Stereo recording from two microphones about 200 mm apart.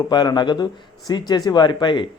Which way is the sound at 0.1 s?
20° left (ahead or behind).